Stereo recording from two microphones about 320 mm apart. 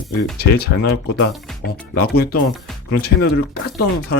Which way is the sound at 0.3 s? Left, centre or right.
Left.